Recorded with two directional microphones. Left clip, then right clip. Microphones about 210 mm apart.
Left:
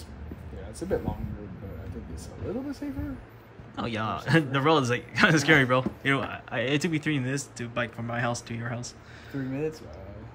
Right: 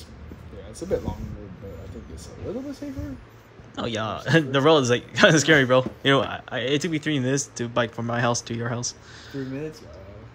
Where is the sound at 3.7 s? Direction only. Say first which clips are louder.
Right 3 dB; 5° right (ahead or behind).